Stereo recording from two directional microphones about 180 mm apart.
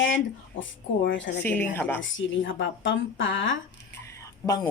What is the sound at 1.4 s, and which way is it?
Speech, 10° left (ahead or behind).